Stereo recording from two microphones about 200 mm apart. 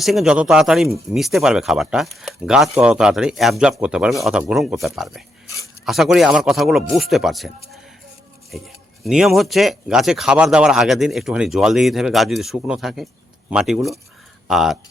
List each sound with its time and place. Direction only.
0.0 s speech: centre (ahead or behind)